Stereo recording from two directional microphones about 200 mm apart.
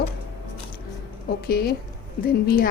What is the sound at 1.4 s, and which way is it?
A woman's voice, 50° left (ahead or behind).